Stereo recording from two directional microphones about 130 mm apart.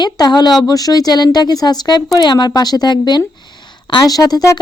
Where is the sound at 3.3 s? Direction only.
35° left (ahead or behind).